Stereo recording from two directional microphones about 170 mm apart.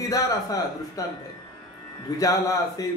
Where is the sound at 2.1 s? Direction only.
20° left (ahead or behind).